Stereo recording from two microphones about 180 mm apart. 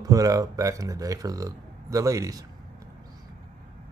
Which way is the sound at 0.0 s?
20° right (ahead or behind).